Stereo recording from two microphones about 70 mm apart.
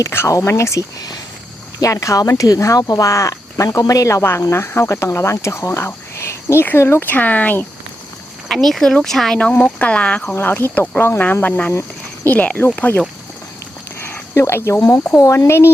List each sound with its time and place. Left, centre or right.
0.0 s speech: left
1.8 s speech: left
3.1 s speech: left
7.1 s speech: left
8.4 s speech: centre
9.4 s speech: centre
10.3 s speech: left
14.0 s a sound: left
14.8 s speech: left